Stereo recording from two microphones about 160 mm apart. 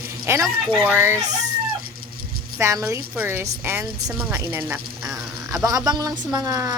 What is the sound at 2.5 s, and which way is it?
Speech, 15° right (ahead or behind).